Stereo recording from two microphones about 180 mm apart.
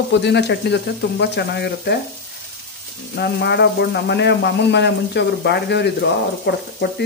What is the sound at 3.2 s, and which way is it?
Speech, 65° left (ahead or behind).